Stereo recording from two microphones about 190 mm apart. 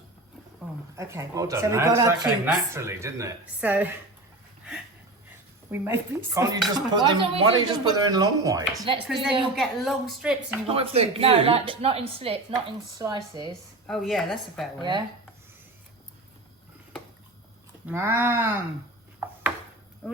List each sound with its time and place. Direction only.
0.9 s speech: 15° right (ahead or behind)
5.7 s a woman's voice: 10° right (ahead or behind)
9.1 s a woman's voice: centre (ahead or behind)
10.7 s a woman's voice: 30° right (ahead or behind)
13.8 s a woman's voice: centre (ahead or behind)
14.8 s a woman's voice: 25° right (ahead or behind)
17.8 s speech: 15° right (ahead or behind)